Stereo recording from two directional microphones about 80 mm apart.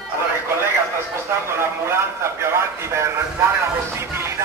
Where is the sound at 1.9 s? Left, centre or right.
Right.